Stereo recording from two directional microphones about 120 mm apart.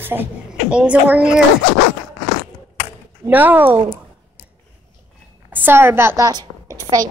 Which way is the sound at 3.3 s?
15° right (ahead or behind).